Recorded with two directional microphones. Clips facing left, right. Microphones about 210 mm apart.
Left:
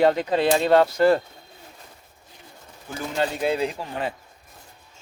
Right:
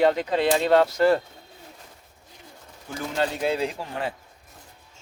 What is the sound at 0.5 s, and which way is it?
Speech, 40° left (ahead or behind).